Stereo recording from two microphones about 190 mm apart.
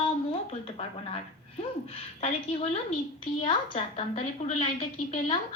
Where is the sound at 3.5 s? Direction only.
35° left (ahead or behind).